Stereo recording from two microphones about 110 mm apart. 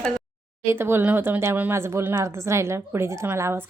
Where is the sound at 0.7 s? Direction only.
20° right (ahead or behind).